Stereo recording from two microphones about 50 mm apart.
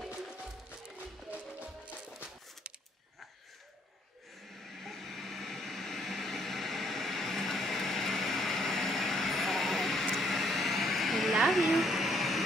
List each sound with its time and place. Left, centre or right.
0.1 s music: right
4.7 s vehicle: centre
10.1 s a sound: centre